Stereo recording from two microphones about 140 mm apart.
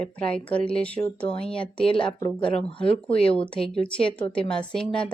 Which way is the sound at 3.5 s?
5° left (ahead or behind).